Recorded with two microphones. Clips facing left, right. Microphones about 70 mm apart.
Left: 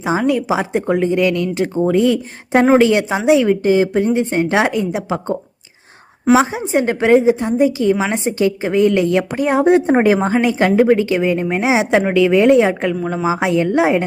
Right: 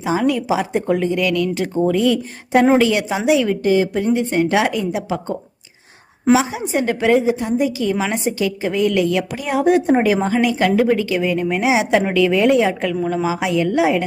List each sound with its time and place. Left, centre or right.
0.0 s a woman's voice: left